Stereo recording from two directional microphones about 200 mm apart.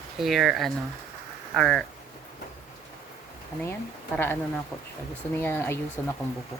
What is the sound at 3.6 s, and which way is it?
Speech, 10° left (ahead or behind).